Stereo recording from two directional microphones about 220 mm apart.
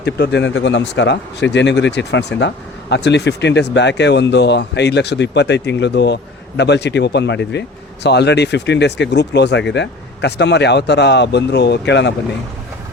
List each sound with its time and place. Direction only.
0.0 s speech: 50° left (ahead or behind)